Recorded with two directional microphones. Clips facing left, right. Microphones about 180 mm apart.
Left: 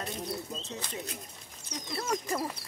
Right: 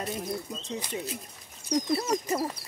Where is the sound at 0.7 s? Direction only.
15° right (ahead or behind).